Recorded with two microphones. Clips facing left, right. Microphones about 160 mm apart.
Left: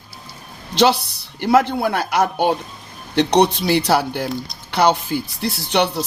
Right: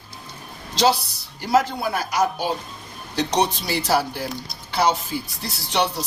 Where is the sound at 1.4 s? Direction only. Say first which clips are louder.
Left 4 dB; 60° left (ahead or behind).